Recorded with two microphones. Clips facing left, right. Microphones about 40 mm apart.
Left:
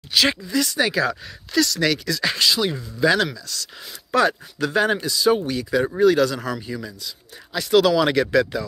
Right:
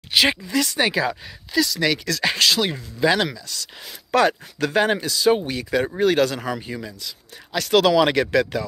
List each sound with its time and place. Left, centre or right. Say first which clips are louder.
0.1 s speech: right 1 dB; right
1.0 s speech: left 1 dB; centre
2.2 s speech: right 1 dB; right
2.7 s speech: left 1 dB; right
4.1 s speech: right 1 dB; right
6.4 s speech: even; right
7.0 s speech: even; right
7.8 s speech: right 1 dB; right